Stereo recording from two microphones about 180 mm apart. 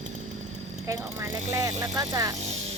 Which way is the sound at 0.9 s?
20° right (ahead or behind).